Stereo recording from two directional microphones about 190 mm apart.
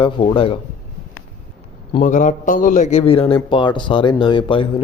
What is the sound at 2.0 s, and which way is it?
Speech, 40° left (ahead or behind).